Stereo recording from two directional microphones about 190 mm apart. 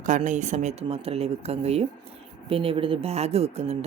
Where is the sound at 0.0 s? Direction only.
40° right (ahead or behind).